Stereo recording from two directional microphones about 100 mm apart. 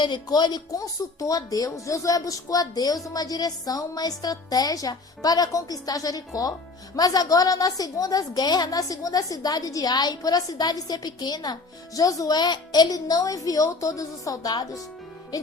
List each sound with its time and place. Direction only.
0.0 s a woman's voice: 45° left (ahead or behind)